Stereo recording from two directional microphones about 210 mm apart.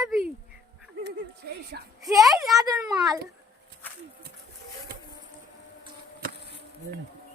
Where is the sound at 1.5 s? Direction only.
50° right (ahead or behind).